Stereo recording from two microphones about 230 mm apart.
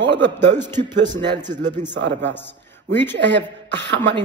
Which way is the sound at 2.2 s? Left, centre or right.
Centre.